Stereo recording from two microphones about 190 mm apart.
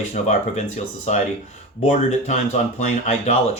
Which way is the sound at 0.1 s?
35° left (ahead or behind).